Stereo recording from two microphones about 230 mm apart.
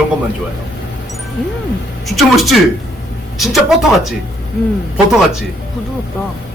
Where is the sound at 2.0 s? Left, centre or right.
Centre.